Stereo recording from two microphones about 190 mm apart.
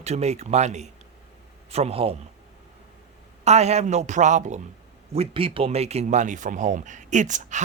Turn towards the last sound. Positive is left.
turn(degrees=-40)  # may be behind; listen again after turning